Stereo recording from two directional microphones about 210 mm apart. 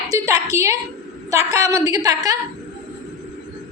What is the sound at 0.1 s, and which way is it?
Speech, 15° right (ahead or behind).